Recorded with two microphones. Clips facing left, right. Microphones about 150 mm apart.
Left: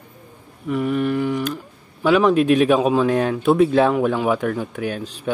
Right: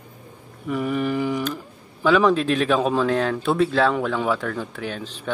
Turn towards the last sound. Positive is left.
turn(degrees=10)  # may be behind; listen again after turning